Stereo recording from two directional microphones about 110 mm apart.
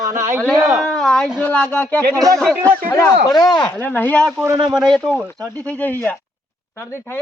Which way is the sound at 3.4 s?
40° left (ahead or behind).